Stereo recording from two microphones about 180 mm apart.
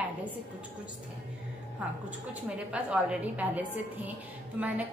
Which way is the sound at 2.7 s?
5° right (ahead or behind).